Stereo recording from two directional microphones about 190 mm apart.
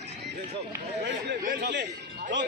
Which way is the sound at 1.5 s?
65° right (ahead or behind).